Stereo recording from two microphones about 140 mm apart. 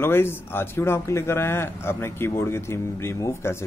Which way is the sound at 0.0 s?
15° left (ahead or behind).